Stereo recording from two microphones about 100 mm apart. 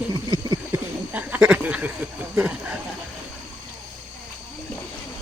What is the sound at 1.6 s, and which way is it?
Speech, 15° right (ahead or behind).